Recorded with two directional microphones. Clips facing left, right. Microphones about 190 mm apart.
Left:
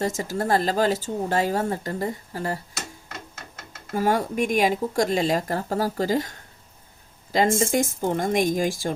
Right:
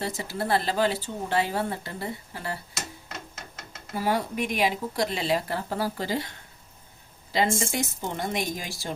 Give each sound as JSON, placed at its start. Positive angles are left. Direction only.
{"t": 0.0, "sound": "speech", "side_deg": 45}
{"t": 3.9, "sound": "speech", "side_deg": 45}
{"t": 7.3, "sound": "speech", "side_deg": 45}